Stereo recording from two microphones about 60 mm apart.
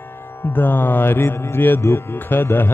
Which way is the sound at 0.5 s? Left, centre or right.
Left.